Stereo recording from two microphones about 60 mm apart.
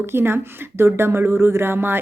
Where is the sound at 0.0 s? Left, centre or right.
Right.